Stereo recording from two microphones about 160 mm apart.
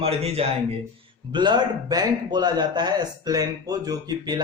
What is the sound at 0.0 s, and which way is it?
Speech, 40° right (ahead or behind).